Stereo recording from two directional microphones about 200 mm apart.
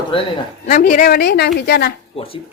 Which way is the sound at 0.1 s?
25° left (ahead or behind).